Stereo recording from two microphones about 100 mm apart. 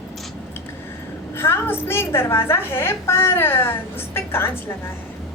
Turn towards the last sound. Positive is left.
turn(degrees=25)  # may be behind; listen again after turning